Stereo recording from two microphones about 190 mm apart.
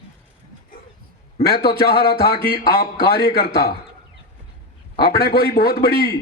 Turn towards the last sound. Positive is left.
turn(degrees=55)  # may be behind; listen again after turning